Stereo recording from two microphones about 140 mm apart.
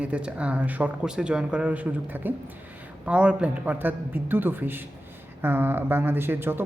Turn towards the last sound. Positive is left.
turn(degrees=-15)  # may be behind; listen again after turning